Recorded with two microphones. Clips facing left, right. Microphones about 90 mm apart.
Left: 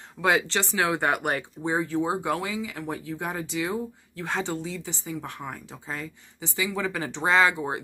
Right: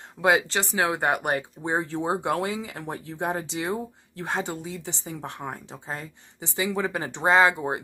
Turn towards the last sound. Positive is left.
turn(degrees=-25)  # may be behind; listen again after turning